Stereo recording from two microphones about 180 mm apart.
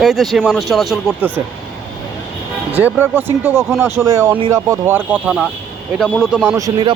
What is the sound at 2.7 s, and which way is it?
A man's voice, 10° right (ahead or behind).